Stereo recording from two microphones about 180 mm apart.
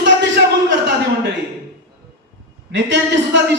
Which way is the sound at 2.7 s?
80° right.